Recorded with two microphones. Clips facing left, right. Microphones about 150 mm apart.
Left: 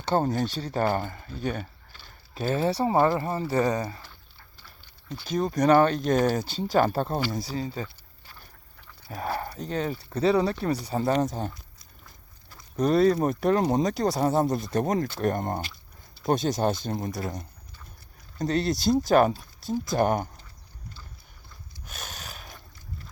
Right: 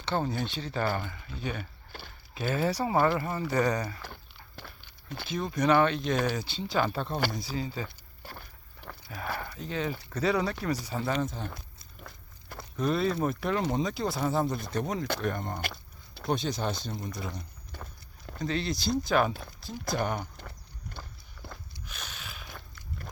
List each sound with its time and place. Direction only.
0.0 s speech: 45° left (ahead or behind); by 4.0 s 30° left (ahead or behind)
5.3 s speech: 40° left (ahead or behind)
9.0 s speech: 35° left (ahead or behind)
12.0 s a sound: 65° right (ahead or behind)
12.7 s speech: 40° left (ahead or behind)
15.6 s a sound: 70° right (ahead or behind)
16.2 s speech: 45° left (ahead or behind)
18.3 s speech: 40° left (ahead or behind)
21.0 s horse: 50° right (ahead or behind)
21.8 s a sound: 45° left (ahead or behind)